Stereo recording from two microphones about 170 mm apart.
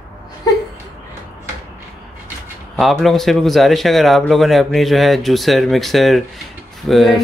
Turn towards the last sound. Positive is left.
turn(degrees=0)  # may be behind; listen again after turning